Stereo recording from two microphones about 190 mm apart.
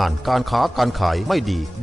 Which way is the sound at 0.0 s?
Centre (ahead or behind).